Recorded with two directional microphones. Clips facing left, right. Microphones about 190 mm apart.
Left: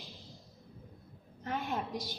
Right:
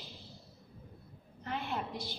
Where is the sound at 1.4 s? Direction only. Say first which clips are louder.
Left 2 dB; 45° left (ahead or behind).